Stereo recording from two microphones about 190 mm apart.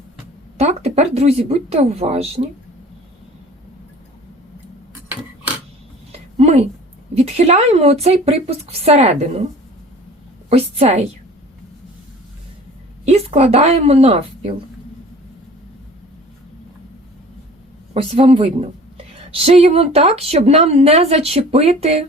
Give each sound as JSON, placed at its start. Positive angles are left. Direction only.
{"t": 0.5, "sound": "a woman's voice", "side_deg": -35}
{"t": 6.1, "sound": "a sound", "side_deg": -35}
{"t": 7.1, "sound": "a woman's voice", "side_deg": -35}
{"t": 10.5, "sound": "a woman's voice", "side_deg": -35}
{"t": 13.1, "sound": "a woman's voice", "side_deg": -35}
{"t": 17.9, "sound": "a woman's voice", "side_deg": -30}